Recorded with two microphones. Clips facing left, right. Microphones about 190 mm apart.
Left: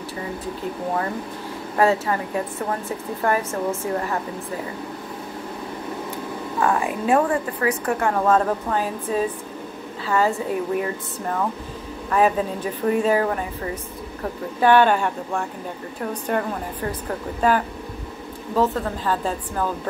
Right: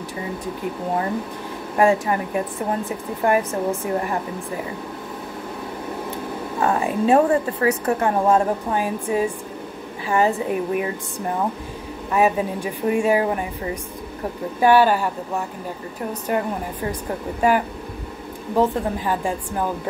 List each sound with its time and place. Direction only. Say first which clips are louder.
1.8 s a woman's voice: right 2 dB; 15° right (ahead or behind)
6.6 s a woman's voice: right 2 dB; 30° right (ahead or behind); by 13.5 s 15° right (ahead or behind)
14.6 s a woman's voice: right 1 dB; 10° right (ahead or behind)